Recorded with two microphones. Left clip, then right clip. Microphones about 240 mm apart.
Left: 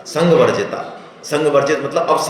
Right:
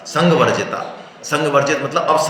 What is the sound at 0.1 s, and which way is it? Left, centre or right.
Speech, right.